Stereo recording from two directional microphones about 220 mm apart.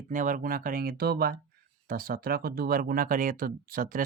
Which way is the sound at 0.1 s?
35° right (ahead or behind).